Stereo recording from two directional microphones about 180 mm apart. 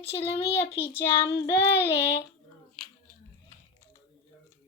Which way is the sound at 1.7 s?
70° left (ahead or behind).